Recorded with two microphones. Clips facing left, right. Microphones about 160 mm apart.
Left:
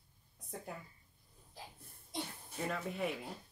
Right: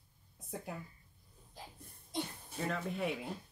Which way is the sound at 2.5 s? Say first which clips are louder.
Right 2 dB; centre (ahead or behind).